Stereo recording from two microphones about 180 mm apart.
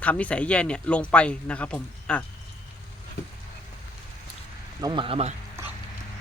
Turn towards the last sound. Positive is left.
turn(degrees=-35)  # may be behind; listen again after turning